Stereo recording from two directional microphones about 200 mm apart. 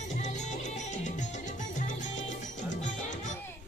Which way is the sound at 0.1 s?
35° left (ahead or behind).